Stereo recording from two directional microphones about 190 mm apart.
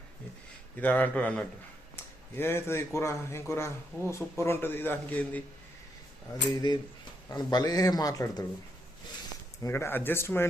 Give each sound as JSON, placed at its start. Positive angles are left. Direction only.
{"t": 0.8, "sound": "a man's voice", "side_deg": 10}
{"t": 6.5, "sound": "a man's voice", "side_deg": 20}
{"t": 9.6, "sound": "a man's voice", "side_deg": 15}